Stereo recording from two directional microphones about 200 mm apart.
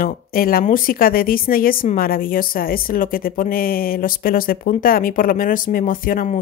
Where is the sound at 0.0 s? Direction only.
45° left (ahead or behind).